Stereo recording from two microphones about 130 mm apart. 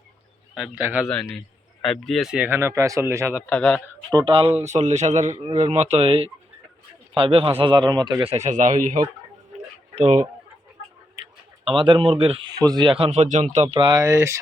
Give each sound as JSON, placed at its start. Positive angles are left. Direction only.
{"t": 0.5, "sound": "a man's voice", "side_deg": -5}
{"t": 3.5, "sound": "speech", "side_deg": 10}
{"t": 4.1, "sound": "speech", "side_deg": -40}
{"t": 4.6, "sound": "a man's voice", "side_deg": -65}
{"t": 7.6, "sound": "speech", "side_deg": -35}
{"t": 8.3, "sound": "speech", "side_deg": -70}
{"t": 9.9, "sound": "speech", "side_deg": -55}
{"t": 11.8, "sound": "speech", "side_deg": -40}
{"t": 12.5, "sound": "speech", "side_deg": -30}
{"t": 13.1, "sound": "a man's voice", "side_deg": -70}
{"t": 13.9, "sound": "speech", "side_deg": -25}